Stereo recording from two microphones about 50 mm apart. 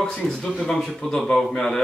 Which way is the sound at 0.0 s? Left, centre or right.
Left.